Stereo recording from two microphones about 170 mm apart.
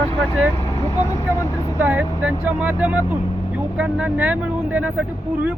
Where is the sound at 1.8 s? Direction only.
10° right (ahead or behind).